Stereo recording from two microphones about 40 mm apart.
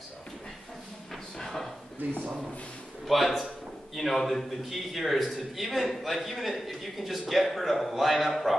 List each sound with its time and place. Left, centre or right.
1.4 s a sound: centre
2.0 s speech: right
3.1 s a man's voice: centre